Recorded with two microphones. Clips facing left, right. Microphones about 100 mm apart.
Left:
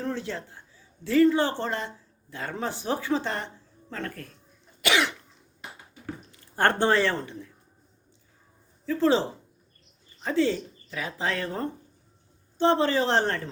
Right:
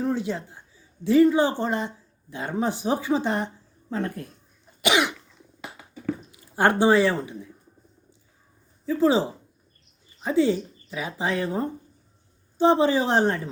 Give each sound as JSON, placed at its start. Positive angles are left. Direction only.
{"t": 0.0, "sound": "speech", "side_deg": -15}
{"t": 4.8, "sound": "cough", "side_deg": -20}
{"t": 6.3, "sound": "speech", "side_deg": -10}
{"t": 8.9, "sound": "speech", "side_deg": -10}